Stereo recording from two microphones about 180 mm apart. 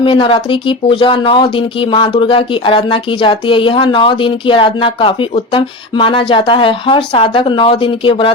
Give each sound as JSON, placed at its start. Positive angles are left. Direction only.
{"t": 0.0, "sound": "speech", "side_deg": 30}